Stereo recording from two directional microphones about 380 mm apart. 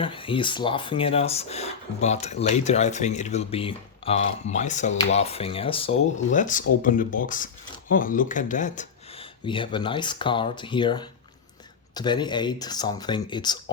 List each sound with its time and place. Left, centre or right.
0.0 s speech: centre